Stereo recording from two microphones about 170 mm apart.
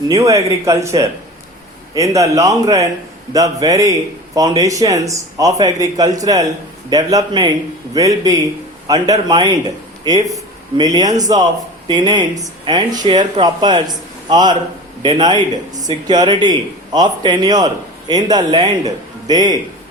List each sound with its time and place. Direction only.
0.1 s a man's voice: 20° right (ahead or behind)